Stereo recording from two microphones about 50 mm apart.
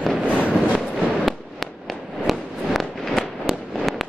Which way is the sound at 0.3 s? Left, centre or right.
Left.